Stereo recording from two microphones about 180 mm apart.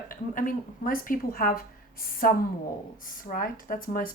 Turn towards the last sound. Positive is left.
turn(degrees=50)  # may be behind; listen again after turning